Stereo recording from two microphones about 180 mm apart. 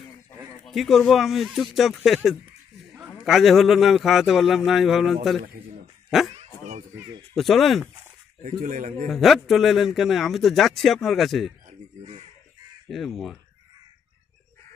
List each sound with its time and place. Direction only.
0.7 s a man's voice: centre (ahead or behind)
3.3 s a man's voice: centre (ahead or behind)
6.3 s dog: 40° right (ahead or behind)
7.3 s a man's voice: centre (ahead or behind)
8.5 s speech: 50° right (ahead or behind)
9.1 s a man's voice: centre (ahead or behind)
12.8 s a man's voice: centre (ahead or behind)